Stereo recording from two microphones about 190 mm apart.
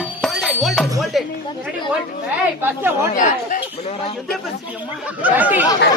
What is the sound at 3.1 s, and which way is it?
Speech, 45° left (ahead or behind).